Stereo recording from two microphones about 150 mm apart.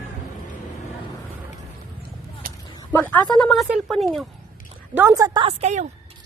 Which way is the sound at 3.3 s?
Centre (ahead or behind).